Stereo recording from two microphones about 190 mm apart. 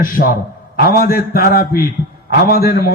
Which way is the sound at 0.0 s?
50° left (ahead or behind).